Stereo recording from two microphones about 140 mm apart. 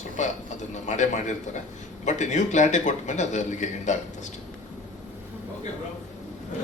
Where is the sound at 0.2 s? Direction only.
60° left (ahead or behind).